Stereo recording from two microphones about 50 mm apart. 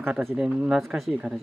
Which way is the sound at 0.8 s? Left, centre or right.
Centre.